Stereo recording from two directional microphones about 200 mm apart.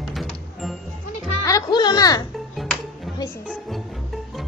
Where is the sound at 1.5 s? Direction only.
20° left (ahead or behind).